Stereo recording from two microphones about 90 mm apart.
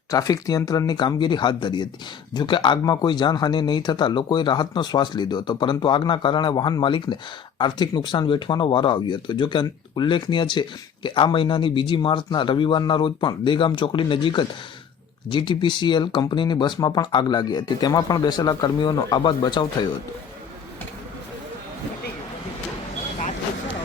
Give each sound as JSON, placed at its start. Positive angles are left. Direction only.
{"t": 0.1, "sound": "speech", "side_deg": 40}
{"t": 0.9, "sound": "speech", "side_deg": 55}